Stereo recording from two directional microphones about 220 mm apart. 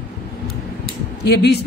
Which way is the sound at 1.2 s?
50° left (ahead or behind).